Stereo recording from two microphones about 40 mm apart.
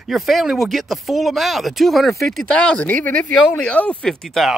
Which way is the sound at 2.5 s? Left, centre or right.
Left.